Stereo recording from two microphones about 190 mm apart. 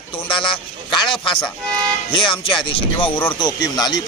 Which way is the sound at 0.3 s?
25° left (ahead or behind).